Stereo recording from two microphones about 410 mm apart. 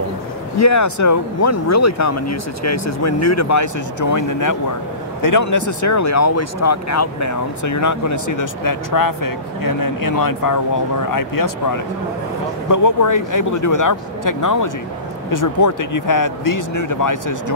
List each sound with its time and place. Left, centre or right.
0.6 s speech: left